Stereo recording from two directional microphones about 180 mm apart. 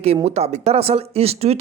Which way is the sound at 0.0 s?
35° right (ahead or behind).